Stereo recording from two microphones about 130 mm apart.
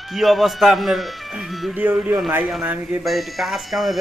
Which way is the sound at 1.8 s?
15° right (ahead or behind).